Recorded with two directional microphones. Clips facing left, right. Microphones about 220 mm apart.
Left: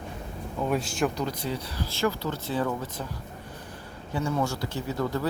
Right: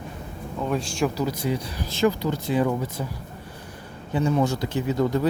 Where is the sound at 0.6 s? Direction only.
5° left (ahead or behind).